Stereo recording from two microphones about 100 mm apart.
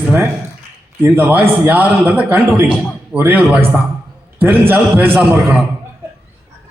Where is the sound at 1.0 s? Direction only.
20° right (ahead or behind).